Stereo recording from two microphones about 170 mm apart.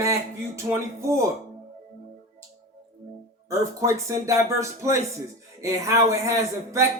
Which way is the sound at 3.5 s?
20° right (ahead or behind).